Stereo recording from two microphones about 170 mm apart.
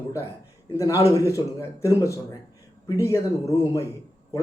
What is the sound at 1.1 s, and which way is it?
Speech, 20° left (ahead or behind).